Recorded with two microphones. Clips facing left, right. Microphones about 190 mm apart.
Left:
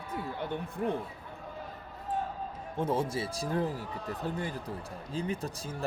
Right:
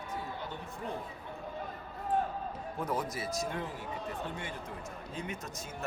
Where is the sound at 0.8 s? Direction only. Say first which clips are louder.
Left 8 dB; 55° left (ahead or behind).